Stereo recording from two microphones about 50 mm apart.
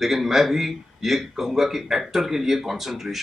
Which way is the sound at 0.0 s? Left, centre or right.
Centre.